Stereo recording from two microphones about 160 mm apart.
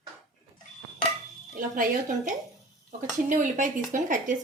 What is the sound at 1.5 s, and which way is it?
A woman's voice, 55° right (ahead or behind).